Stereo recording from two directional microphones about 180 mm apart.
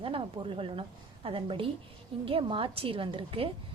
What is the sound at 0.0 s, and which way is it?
A woman's voice, 30° right (ahead or behind).